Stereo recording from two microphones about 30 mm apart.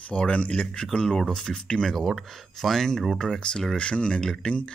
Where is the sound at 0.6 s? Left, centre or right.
Left.